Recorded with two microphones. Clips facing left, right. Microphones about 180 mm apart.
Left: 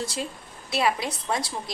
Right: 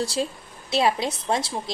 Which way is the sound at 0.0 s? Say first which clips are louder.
Right 5 dB; 35° right (ahead or behind).